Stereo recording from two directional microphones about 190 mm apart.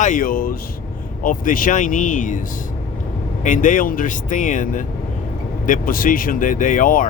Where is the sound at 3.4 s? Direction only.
45° left (ahead or behind).